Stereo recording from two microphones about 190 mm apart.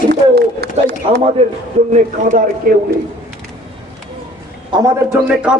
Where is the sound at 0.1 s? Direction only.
55° right (ahead or behind).